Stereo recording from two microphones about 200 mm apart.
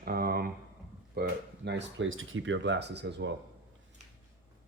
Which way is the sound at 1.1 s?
60° right (ahead or behind).